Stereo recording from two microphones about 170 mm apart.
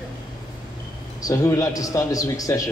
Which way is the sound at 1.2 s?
20° left (ahead or behind).